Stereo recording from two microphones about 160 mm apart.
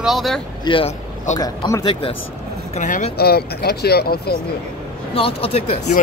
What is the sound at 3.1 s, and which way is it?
Speech, 75° left (ahead or behind).